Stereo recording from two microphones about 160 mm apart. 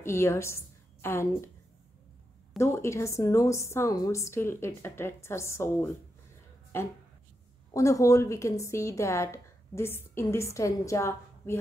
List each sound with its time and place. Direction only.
0.0 s a woman's voice: 15° left (ahead or behind)
2.6 s a woman's voice: 15° left (ahead or behind)